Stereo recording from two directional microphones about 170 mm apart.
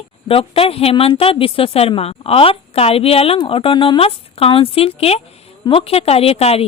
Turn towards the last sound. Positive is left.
turn(degrees=35)  # may be behind; listen again after turning